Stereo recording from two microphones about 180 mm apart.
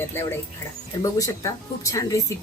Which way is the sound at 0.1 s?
15° left (ahead or behind).